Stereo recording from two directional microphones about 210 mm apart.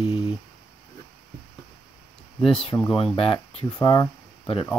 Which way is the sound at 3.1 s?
25° left (ahead or behind).